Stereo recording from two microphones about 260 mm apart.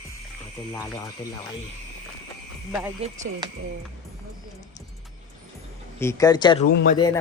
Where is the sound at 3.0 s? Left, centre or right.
Right.